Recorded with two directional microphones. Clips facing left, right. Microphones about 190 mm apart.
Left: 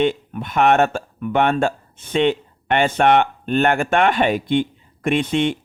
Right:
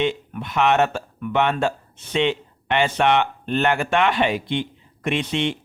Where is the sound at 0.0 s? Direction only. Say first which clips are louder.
Left 4 dB; 50° left (ahead or behind).